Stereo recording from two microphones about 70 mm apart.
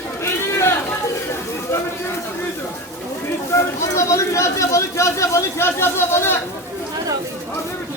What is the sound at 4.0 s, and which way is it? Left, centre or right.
Speech, left.